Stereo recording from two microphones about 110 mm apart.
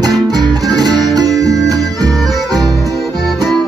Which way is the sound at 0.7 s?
35° right (ahead or behind).